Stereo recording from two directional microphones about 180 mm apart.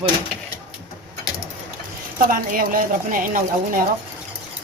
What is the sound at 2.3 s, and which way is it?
Speech, 50° right (ahead or behind).